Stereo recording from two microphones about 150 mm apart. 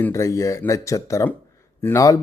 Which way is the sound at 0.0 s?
20° left (ahead or behind).